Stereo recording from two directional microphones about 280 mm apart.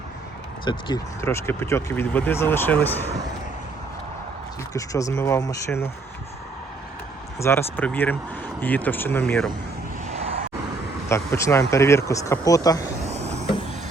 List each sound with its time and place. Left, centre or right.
0.6 s speech: centre
4.7 s speech: centre
7.3 s speech: centre
11.1 s speech: centre
13.1 s vehicle: right